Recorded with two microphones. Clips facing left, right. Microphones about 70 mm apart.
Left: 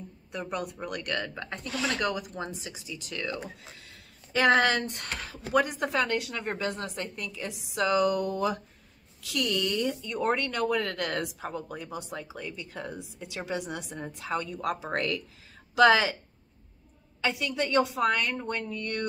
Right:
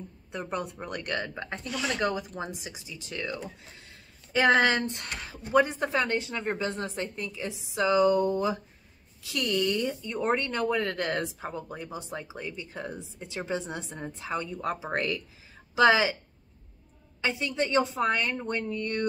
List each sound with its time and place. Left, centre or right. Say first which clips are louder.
0.3 s speech: even; right
3.8 s a sound: even; right
5.5 s speech: right 2 dB; right
14.3 s speech: left 1 dB; centre
17.2 s speech: even; right